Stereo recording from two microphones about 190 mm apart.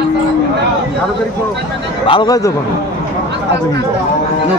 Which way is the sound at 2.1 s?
20° left (ahead or behind).